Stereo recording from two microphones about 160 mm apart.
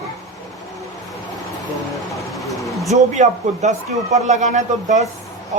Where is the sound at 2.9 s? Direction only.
45° right (ahead or behind).